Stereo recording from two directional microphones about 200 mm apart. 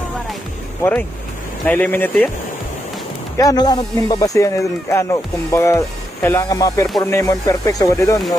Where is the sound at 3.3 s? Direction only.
20° left (ahead or behind).